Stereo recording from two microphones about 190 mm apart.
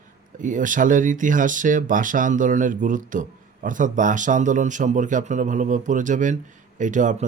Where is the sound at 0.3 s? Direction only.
45° right (ahead or behind).